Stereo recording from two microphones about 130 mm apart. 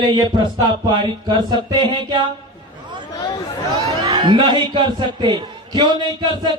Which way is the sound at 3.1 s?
30° left (ahead or behind).